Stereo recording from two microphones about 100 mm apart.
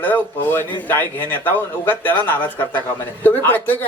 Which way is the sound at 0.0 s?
20° left (ahead or behind).